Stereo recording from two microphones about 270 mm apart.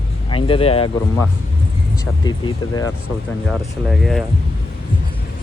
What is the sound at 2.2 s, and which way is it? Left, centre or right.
Speech, centre.